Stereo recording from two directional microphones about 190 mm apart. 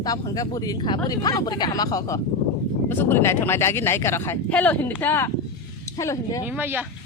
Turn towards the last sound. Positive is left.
turn(degrees=-10)  # may be behind; listen again after turning